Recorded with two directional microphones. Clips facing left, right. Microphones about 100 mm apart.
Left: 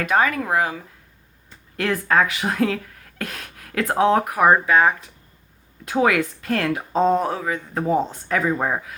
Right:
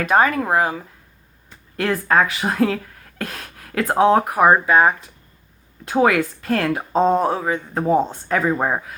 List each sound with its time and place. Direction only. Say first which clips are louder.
0.0 s speech: right 3 dB; 35° right (ahead or behind)